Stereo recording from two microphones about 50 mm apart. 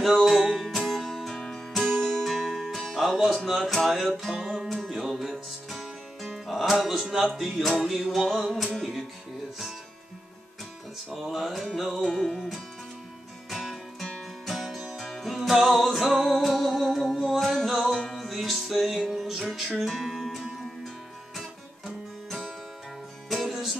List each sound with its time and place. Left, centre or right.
0.0 s music: centre
4.6 s music: centre
5.0 s music: centre
11.1 s music: centre